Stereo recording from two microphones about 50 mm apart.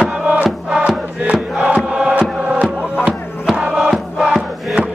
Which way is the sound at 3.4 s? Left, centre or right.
Centre.